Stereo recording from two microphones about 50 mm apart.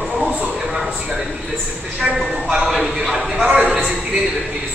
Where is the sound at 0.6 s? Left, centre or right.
Centre.